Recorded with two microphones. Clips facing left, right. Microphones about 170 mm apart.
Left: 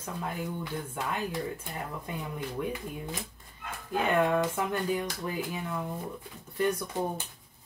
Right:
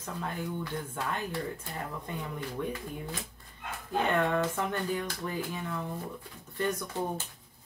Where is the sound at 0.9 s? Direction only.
10° left (ahead or behind).